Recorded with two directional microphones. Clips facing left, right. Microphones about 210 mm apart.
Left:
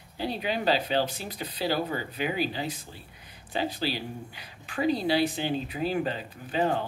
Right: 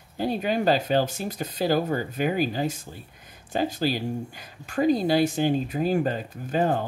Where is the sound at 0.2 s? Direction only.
45° right (ahead or behind).